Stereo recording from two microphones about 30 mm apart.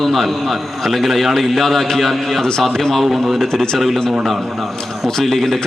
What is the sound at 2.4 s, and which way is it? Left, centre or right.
Speech, centre.